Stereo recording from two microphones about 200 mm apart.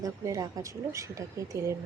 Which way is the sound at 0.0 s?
15° right (ahead or behind).